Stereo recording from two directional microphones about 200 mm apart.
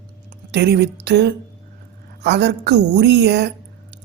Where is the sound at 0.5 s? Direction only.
55° right (ahead or behind).